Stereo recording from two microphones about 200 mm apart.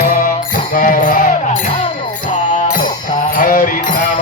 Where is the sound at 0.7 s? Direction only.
45° left (ahead or behind).